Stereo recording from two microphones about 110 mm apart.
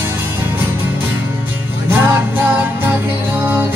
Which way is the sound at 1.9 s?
20° right (ahead or behind).